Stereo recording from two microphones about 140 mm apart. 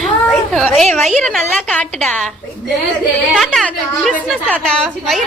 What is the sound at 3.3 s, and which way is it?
A woman's voice, 5° left (ahead or behind).